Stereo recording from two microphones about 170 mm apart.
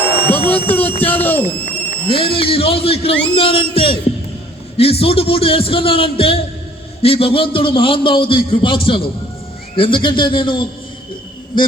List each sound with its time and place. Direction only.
0.3 s a sound: 10° left (ahead or behind)
0.8 s a man's voice: 10° left (ahead or behind)
2.0 s a man's voice: 30° left (ahead or behind)